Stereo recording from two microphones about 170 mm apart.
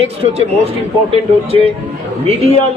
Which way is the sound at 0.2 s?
35° right (ahead or behind).